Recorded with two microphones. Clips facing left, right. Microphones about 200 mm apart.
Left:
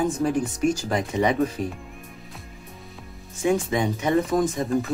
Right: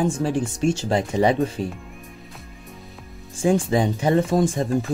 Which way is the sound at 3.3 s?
30° right (ahead or behind).